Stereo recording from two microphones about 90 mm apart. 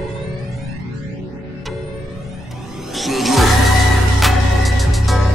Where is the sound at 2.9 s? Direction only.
Centre (ahead or behind).